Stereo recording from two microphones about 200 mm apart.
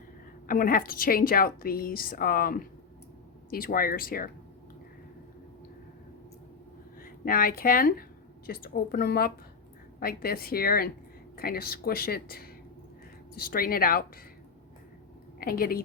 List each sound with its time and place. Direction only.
0.4 s a woman's voice: 45° left (ahead or behind)
7.0 s a woman's voice: 45° left (ahead or behind)
15.4 s a woman's voice: 45° left (ahead or behind)